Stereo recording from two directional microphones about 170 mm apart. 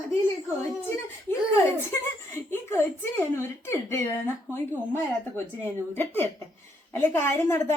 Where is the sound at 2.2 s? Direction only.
15° left (ahead or behind).